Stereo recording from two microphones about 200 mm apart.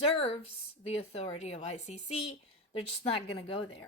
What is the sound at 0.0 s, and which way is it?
A woman's voice, 30° left (ahead or behind).